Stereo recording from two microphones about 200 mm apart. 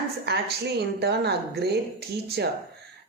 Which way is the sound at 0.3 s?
55° right (ahead or behind).